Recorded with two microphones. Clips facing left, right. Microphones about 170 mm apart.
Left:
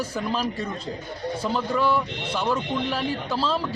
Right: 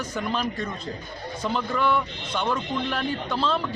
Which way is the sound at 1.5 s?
5° left (ahead or behind).